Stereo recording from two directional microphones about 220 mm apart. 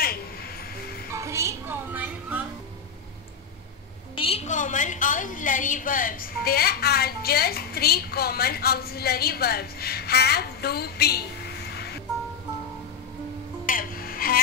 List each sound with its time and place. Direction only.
0.0 s music: 45° left (ahead or behind)
1.1 s music: 15° right (ahead or behind)
4.1 s a woman's voice: 25° left (ahead or behind); by 11.1 s 45° left (ahead or behind)
11.7 s music: 45° left (ahead or behind)
13.7 s music: 40° left (ahead or behind)